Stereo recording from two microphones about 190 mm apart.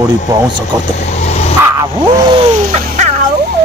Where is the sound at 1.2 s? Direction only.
35° left (ahead or behind).